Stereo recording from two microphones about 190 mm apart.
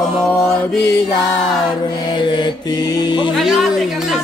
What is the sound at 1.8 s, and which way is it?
Music, 25° left (ahead or behind).